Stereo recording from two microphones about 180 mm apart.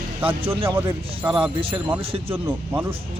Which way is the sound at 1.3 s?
30° right (ahead or behind).